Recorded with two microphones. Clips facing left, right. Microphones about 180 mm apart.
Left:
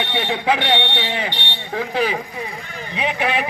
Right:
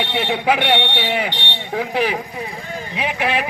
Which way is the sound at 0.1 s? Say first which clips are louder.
Right 1 dB; 5° right (ahead or behind).